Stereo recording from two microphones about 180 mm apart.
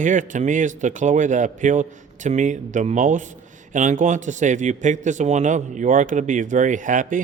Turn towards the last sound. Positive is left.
turn(degrees=-45)  # may be behind; listen again after turning